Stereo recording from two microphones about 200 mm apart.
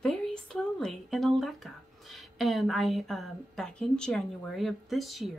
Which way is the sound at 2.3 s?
Centre (ahead or behind).